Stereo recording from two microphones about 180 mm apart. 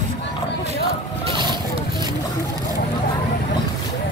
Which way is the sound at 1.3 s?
25° right (ahead or behind).